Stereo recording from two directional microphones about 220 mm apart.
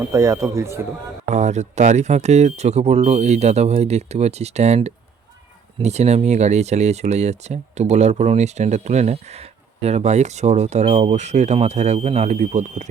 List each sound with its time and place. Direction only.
0.0 s a man's voice: 15° right (ahead or behind)
1.3 s speech: 30° right (ahead or behind)